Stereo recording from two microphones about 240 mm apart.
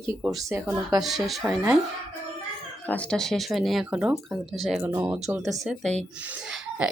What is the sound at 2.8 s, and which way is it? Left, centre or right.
Speech, centre.